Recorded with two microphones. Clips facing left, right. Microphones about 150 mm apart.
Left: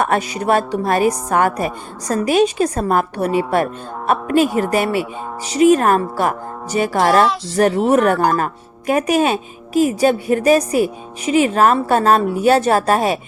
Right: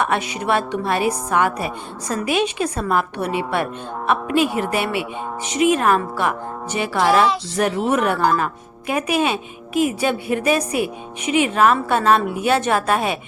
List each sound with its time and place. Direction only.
0.0 s a woman's voice: 40° left (ahead or behind)